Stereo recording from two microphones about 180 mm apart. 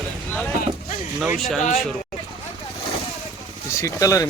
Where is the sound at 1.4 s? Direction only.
Centre (ahead or behind).